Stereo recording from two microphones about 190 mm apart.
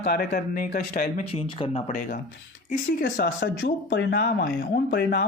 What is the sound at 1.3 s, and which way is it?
Speech, 30° left (ahead or behind).